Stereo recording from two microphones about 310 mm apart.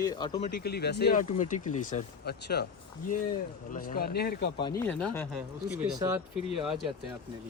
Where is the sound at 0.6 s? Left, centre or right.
Left.